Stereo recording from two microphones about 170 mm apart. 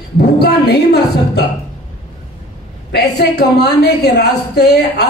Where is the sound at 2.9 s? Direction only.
70° left (ahead or behind).